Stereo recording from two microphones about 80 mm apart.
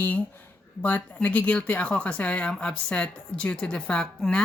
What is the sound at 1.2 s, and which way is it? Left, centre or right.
Speech, centre.